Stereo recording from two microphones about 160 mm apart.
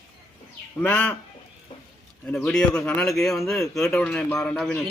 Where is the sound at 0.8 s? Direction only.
10° left (ahead or behind).